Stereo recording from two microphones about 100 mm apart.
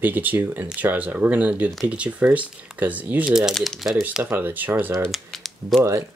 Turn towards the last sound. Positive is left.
turn(degrees=0)  # may be behind; listen again after turning